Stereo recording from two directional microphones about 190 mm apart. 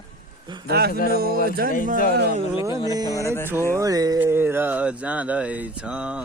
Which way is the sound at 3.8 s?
20° right (ahead or behind).